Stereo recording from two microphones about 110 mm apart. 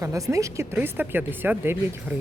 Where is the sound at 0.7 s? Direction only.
15° right (ahead or behind).